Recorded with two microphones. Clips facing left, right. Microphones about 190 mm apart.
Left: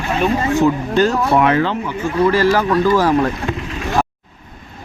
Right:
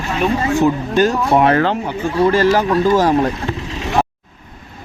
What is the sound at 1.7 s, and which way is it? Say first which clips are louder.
Speech: right 2 dB; 30° right (ahead or behind).